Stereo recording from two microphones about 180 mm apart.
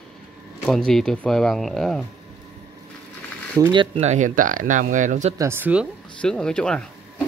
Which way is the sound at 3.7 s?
30° right (ahead or behind).